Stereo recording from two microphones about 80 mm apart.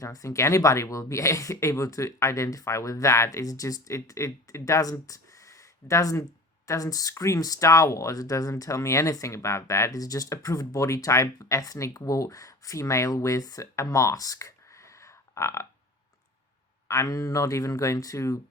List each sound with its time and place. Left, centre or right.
0.0 s speech: left
16.9 s speech: left